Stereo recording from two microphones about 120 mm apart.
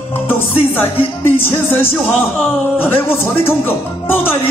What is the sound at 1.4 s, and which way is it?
Music, 15° left (ahead or behind).